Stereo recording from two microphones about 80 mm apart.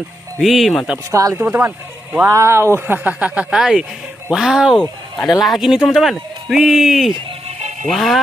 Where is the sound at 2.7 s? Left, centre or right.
Right.